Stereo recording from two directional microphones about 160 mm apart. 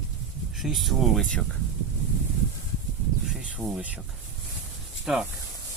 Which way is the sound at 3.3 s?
5° right (ahead or behind).